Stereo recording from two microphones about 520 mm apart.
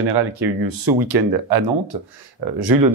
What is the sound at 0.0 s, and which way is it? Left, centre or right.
Speech, right.